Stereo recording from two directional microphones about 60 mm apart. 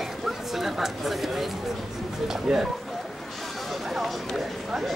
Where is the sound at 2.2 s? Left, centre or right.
Centre.